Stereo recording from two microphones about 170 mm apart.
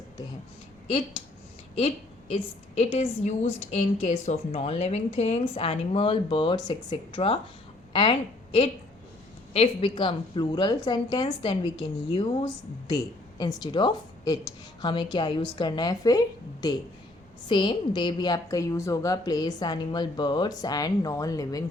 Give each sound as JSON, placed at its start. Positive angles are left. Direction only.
{"t": 2.3, "sound": "speech", "side_deg": 35}
{"t": 9.5, "sound": "a woman's voice", "side_deg": 35}
{"t": 13.4, "sound": "a woman's voice", "side_deg": 25}